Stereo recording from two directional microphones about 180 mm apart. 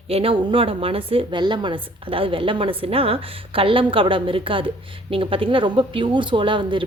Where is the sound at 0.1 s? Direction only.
30° right (ahead or behind).